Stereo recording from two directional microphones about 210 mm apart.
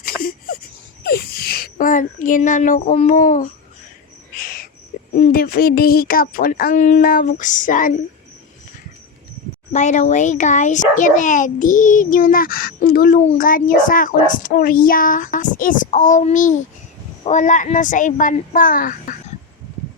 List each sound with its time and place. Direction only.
0.0 s a sound: 45° left (ahead or behind)
1.0 s speech: 50° left (ahead or behind)
4.4 s cricket: 40° left (ahead or behind)
5.1 s a child's voice: 40° left (ahead or behind)
9.7 s a child's voice: 35° left (ahead or behind)